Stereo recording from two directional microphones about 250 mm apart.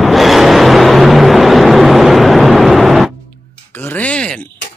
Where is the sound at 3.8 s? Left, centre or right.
Centre.